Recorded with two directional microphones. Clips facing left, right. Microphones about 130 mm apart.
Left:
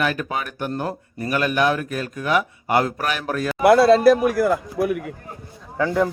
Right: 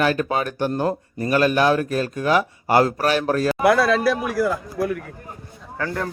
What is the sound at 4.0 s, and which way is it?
Speech, 45° left (ahead or behind).